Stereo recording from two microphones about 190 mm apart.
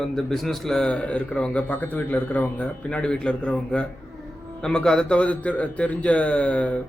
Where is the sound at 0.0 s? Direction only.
Centre (ahead or behind).